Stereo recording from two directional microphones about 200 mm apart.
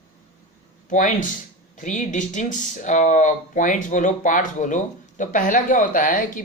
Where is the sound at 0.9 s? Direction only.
40° left (ahead or behind).